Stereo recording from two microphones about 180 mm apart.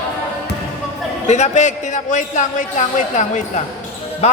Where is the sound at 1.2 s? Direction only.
40° left (ahead or behind).